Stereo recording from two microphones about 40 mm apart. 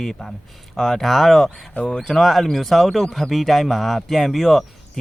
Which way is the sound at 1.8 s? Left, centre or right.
Centre.